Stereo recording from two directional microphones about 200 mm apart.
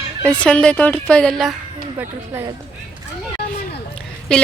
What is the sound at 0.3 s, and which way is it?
A woman's voice, 5° left (ahead or behind).